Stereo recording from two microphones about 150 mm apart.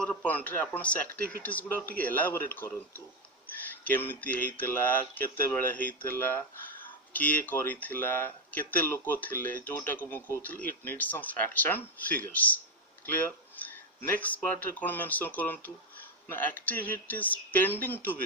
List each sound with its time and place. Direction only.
0.0 s a man's voice: 5° left (ahead or behind)